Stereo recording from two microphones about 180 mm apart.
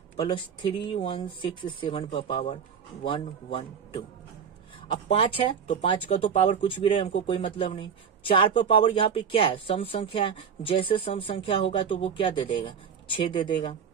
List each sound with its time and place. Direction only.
0.6 s speech: 30° left (ahead or behind)
5.1 s speech: 30° left (ahead or behind)